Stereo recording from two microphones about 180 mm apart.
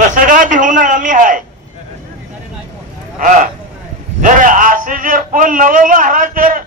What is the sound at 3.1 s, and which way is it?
A man's voice, 45° right (ahead or behind).